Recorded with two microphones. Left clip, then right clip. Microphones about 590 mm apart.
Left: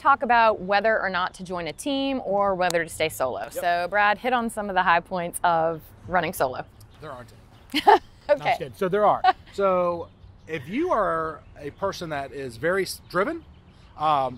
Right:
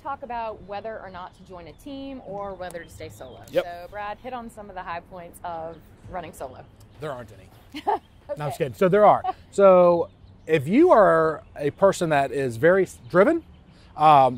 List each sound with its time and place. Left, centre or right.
0.0 s a woman's voice: left
7.0 s speech: right
7.7 s a sound: left
8.4 s speech: right